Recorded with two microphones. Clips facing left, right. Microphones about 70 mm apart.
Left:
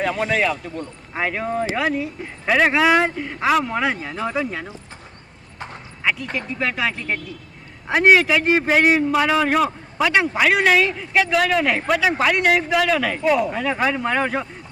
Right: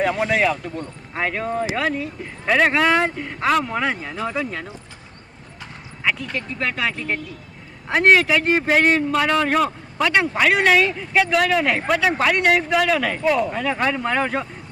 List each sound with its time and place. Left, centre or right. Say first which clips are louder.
0.0 s a man's voice: right 1 dB; centre
6.0 s a sound: even; centre
6.3 s a man's voice: left 1 dB; centre